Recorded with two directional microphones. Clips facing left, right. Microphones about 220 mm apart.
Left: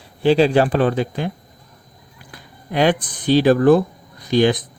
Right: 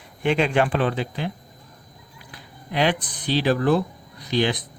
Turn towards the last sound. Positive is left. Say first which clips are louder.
# left 7 dB
turn(degrees=45)  # may be behind; listen again after turning